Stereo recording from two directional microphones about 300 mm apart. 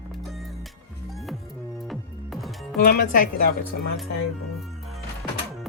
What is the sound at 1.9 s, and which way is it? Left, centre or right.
Music, centre.